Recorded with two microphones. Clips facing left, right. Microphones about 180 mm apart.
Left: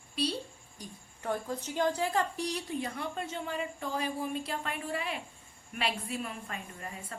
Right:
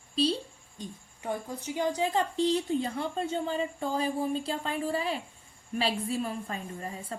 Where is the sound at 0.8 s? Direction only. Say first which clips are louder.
Right 5 dB; 15° right (ahead or behind).